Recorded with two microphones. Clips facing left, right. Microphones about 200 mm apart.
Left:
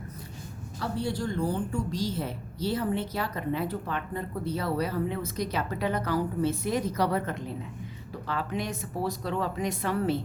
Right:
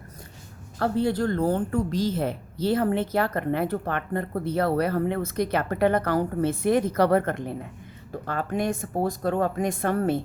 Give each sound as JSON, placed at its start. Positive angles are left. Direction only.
{"t": 0.8, "sound": "a woman's voice", "side_deg": -55}